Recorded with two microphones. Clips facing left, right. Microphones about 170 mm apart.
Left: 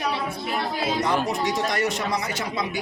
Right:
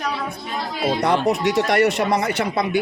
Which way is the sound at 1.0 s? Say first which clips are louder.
Right 5 dB; 65° right (ahead or behind).